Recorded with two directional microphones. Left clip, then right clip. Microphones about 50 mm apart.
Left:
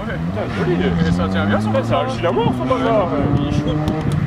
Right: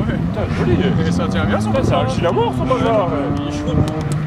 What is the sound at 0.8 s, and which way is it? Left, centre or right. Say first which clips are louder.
Speech: right 1 dB; right.